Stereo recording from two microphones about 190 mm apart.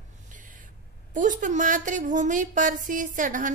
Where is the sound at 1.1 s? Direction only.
45° right (ahead or behind).